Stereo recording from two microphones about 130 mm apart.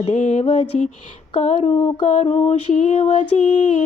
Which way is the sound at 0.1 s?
70° left (ahead or behind).